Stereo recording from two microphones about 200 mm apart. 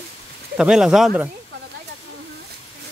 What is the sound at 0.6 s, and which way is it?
Speech, 5° right (ahead or behind).